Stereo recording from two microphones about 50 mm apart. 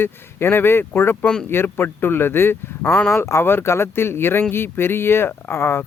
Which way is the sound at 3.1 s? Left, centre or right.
Left.